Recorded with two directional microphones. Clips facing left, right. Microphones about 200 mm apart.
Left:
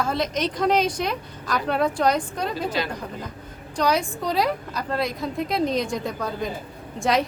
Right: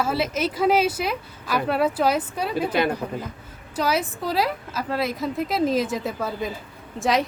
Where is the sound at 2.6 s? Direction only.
55° right (ahead or behind).